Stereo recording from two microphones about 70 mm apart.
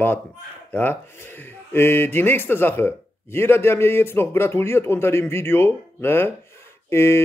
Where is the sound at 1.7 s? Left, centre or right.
Left.